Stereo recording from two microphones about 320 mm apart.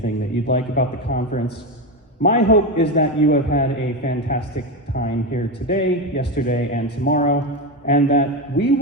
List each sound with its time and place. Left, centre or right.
0.0 s a man's voice: left